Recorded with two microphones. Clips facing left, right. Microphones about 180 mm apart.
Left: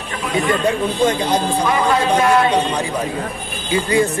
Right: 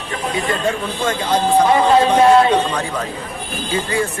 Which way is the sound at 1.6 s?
25° right (ahead or behind).